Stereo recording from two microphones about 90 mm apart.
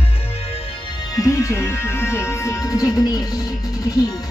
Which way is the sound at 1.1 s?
35° left (ahead or behind).